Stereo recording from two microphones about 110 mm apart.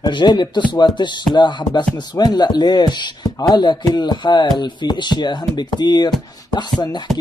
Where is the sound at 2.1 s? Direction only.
40° left (ahead or behind).